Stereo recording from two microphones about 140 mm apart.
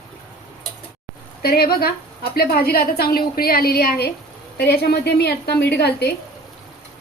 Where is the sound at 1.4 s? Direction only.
90° left.